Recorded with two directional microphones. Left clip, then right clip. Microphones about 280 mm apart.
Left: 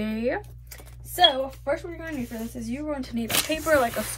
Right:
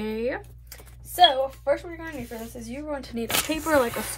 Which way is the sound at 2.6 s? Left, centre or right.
Centre.